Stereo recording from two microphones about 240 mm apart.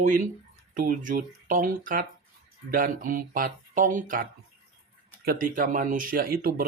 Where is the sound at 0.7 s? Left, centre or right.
Right.